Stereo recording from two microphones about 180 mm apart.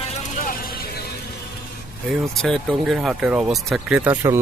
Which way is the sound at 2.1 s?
Centre (ahead or behind).